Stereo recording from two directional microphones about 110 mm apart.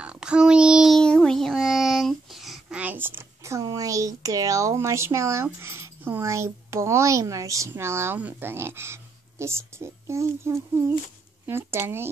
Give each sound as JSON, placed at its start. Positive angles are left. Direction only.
{"t": 0.0, "sound": "child singing", "side_deg": -10}
{"t": 2.8, "sound": "a sound", "side_deg": -15}
{"t": 3.6, "sound": "speech", "side_deg": -30}